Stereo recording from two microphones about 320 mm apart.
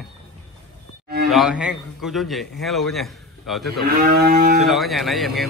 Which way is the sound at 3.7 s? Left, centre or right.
Right.